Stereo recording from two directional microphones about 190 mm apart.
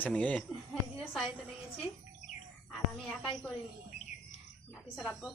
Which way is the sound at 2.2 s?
40° left (ahead or behind).